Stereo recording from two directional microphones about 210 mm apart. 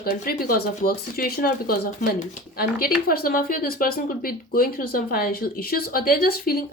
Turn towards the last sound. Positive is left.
turn(degrees=45)  # may be behind; listen again after turning